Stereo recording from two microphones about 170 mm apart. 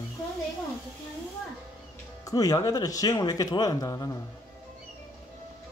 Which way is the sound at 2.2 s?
20° left (ahead or behind).